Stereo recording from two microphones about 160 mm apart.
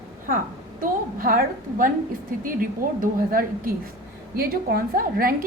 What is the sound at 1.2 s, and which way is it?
Speech, 65° right (ahead or behind).